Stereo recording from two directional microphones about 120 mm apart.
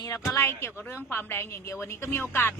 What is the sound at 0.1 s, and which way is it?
Speech, 20° left (ahead or behind).